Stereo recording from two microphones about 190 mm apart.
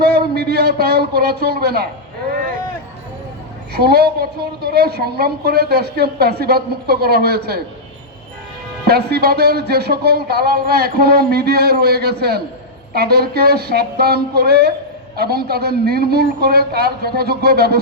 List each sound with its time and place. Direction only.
0.0 s a man's voice: 55° right (ahead or behind)
3.8 s a woman's voice: 55° right (ahead or behind)
8.9 s a woman's voice: 55° right (ahead or behind)